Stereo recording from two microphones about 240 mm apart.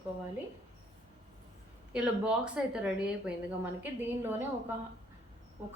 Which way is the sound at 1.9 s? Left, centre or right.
Centre.